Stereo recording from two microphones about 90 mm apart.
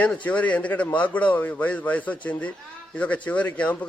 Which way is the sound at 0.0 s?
15° left (ahead or behind).